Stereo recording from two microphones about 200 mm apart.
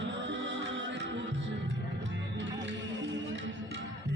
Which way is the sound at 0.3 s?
65° right (ahead or behind).